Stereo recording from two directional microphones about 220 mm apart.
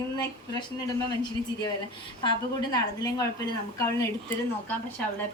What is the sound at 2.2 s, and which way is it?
A woman's voice, 20° left (ahead or behind).